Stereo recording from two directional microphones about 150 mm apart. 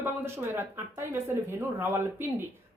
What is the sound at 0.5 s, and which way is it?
Speech, 15° right (ahead or behind).